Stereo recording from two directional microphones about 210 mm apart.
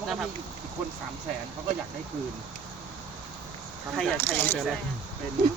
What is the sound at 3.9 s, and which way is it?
Speech, 5° left (ahead or behind).